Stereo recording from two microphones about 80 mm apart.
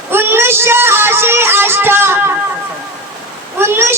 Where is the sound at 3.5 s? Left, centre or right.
Right.